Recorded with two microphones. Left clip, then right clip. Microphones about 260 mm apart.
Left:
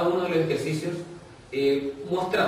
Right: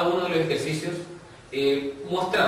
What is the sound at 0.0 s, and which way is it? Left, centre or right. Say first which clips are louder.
A man's voice: even; centre.